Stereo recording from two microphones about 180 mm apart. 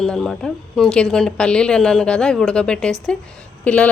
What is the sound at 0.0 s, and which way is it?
A woman's voice, centre (ahead or behind).